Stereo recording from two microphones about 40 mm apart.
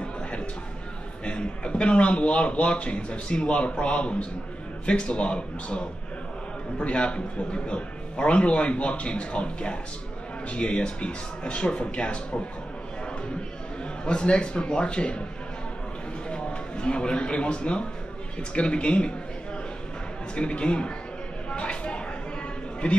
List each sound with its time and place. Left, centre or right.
0.0 s a sound: left
1.2 s a man's voice: left
14.0 s a man's voice: left
16.3 s a man's voice: left
20.3 s a man's voice: left
21.5 s a sound: left